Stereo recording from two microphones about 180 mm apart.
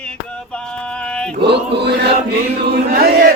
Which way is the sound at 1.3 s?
65° right (ahead or behind).